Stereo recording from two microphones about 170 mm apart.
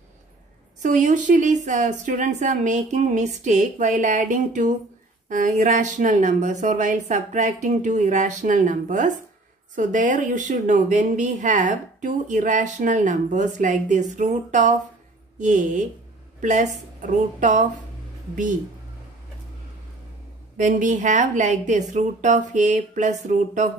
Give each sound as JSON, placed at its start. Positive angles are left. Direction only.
{"t": 0.8, "sound": "speech", "side_deg": -50}
{"t": 20.5, "sound": "speech", "side_deg": -45}